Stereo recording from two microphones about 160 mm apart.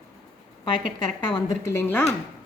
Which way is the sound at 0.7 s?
30° left (ahead or behind).